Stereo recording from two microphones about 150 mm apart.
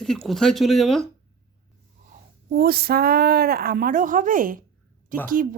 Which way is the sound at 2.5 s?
90° right.